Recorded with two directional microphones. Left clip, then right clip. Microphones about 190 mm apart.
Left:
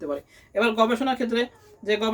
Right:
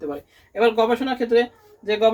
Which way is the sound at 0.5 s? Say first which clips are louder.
Right 3 dB; 35° left (ahead or behind).